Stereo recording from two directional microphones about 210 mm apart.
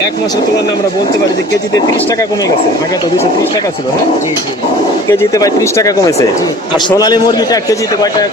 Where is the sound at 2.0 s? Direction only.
15° left (ahead or behind).